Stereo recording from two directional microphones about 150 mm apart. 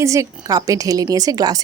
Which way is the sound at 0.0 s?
20° right (ahead or behind).